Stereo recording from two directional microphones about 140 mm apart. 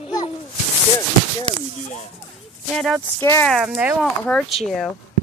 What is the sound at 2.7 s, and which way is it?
Speech, centre (ahead or behind).